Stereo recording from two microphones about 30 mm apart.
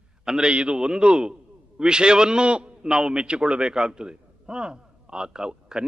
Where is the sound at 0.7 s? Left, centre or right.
Right.